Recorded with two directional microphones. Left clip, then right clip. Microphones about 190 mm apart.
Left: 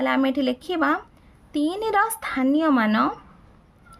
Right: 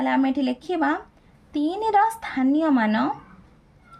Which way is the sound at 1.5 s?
35° left (ahead or behind).